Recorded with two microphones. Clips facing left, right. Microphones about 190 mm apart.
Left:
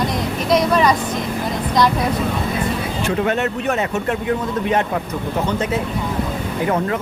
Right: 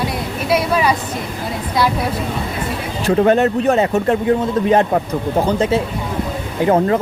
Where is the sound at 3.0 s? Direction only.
35° right (ahead or behind).